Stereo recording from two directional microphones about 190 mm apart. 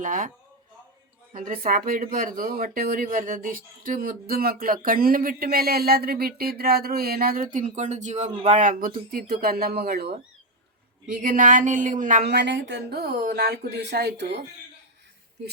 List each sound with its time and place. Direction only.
0.0 s speech: 45° right (ahead or behind)
1.3 s speech: 45° right (ahead or behind)
12.3 s speech: 65° right (ahead or behind)